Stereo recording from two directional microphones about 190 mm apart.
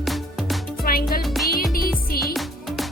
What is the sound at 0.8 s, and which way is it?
Music, 50° left (ahead or behind).